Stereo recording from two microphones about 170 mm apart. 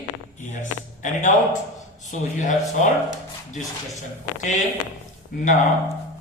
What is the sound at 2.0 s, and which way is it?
Speech, 45° left (ahead or behind).